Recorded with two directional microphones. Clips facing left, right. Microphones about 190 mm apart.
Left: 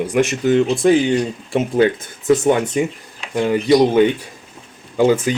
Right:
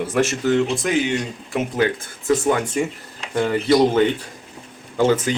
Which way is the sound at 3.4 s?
15° left (ahead or behind).